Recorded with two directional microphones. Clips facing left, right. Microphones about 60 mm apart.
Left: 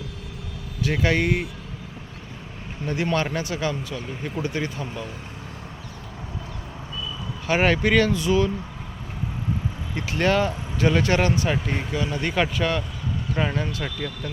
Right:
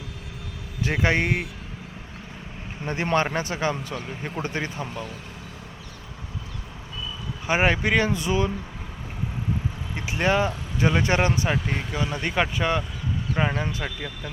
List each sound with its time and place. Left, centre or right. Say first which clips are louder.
0.8 s speech: left 1 dB; right
2.8 s speech: right 1 dB; right
7.4 s speech: left 2 dB; centre
9.9 s speech: left 1 dB; centre
11.5 s speech: left 1 dB; centre
11.9 s speech: left 1 dB; right